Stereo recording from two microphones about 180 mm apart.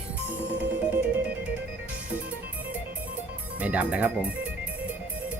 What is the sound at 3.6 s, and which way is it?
Speech, 10° right (ahead or behind).